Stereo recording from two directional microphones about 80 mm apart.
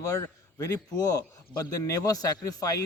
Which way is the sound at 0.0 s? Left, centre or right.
Left.